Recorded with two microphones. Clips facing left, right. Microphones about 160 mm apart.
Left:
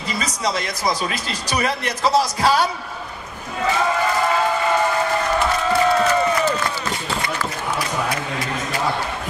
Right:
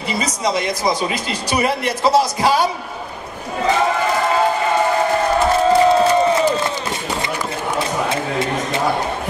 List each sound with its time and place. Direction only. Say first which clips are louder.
0.5 s a man's voice: right 4 dB; 25° right (ahead or behind)
5.7 s crowd: right 4 dB; 25° right (ahead or behind)
8.1 s a sound: right 5 dB; 25° right (ahead or behind)